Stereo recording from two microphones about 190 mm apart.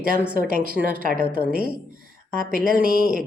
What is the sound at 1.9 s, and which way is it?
Speech, 50° right (ahead or behind).